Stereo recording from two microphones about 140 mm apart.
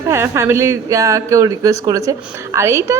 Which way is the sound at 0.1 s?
20° right (ahead or behind).